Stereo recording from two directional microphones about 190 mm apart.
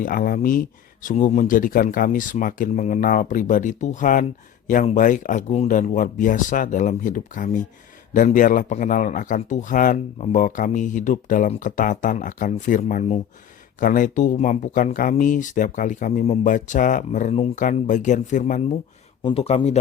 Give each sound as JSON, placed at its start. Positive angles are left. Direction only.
{"t": 0.0, "sound": "a man's voice", "side_deg": 45}
{"t": 19.2, "sound": "speech", "side_deg": 30}